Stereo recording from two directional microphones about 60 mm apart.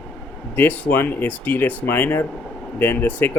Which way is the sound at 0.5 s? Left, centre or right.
Left.